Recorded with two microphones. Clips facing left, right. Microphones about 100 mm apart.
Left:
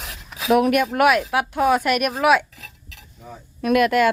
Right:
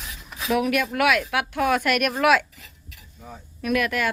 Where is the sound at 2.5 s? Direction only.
90° left.